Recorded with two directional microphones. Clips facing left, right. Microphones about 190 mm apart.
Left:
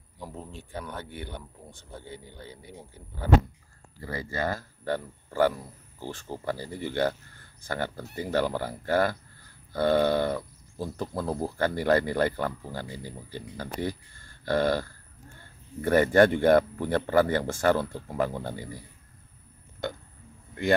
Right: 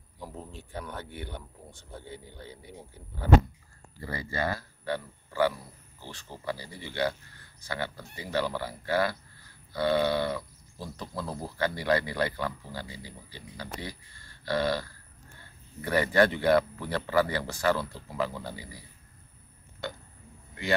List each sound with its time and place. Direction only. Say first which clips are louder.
4.2 s speech: left 1 dB; 45° left (ahead or behind)